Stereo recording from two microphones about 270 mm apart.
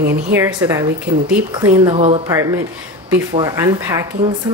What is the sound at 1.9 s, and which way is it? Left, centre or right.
Speech, right.